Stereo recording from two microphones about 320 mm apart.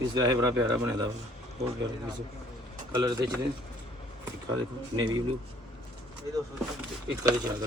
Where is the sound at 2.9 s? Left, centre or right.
Centre.